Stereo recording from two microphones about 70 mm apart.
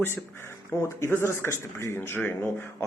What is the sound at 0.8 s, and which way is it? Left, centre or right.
Speech, left.